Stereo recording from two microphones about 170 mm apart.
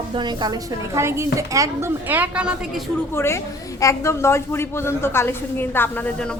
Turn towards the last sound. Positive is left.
turn(degrees=10)  # may be behind; listen again after turning